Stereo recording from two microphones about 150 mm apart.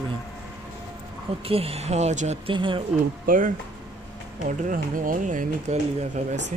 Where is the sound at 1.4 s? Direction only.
40° right (ahead or behind).